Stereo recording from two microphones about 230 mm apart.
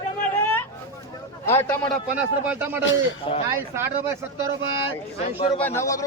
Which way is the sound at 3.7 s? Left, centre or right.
Centre.